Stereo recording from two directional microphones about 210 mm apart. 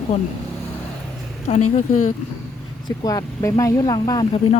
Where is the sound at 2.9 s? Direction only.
15° left (ahead or behind).